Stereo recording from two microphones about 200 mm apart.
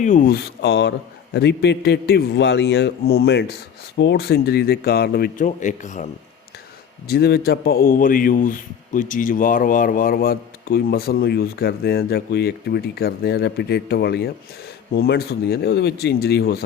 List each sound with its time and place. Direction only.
0.0 s a man's voice: 40° left (ahead or behind)
7.1 s a man's voice: 50° left (ahead or behind)